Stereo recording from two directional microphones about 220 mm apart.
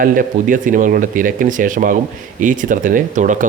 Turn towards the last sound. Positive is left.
turn(degrees=-35)  # may be behind; listen again after turning